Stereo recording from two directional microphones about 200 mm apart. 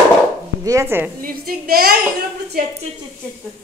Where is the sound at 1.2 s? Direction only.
50° right (ahead or behind).